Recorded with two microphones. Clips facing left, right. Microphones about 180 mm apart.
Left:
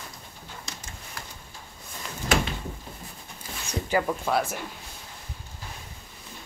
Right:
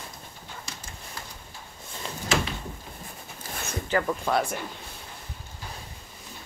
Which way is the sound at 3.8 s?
10° left (ahead or behind).